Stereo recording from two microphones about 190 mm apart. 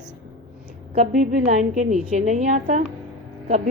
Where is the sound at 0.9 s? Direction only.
40° right (ahead or behind).